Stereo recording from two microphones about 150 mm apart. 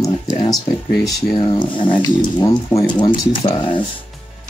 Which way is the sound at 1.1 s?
25° left (ahead or behind).